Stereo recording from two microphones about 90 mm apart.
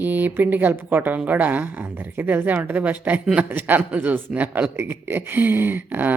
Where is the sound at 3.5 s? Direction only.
20° right (ahead or behind).